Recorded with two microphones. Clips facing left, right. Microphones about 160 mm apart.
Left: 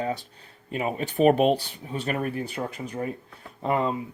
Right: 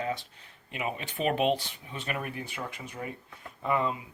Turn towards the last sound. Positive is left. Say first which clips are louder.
# left 4 dB
turn(degrees=35)  # may be behind; listen again after turning